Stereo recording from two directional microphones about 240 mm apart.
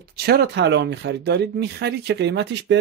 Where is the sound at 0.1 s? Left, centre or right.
Right.